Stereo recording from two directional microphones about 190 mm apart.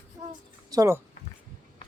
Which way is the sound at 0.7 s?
15° right (ahead or behind).